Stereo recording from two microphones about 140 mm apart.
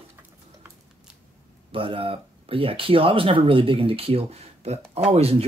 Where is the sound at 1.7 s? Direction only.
40° right (ahead or behind).